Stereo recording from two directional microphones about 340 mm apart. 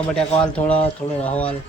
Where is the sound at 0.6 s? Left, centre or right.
Centre.